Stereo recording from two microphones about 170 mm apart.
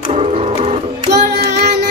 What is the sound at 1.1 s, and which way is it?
Music, 75° right (ahead or behind).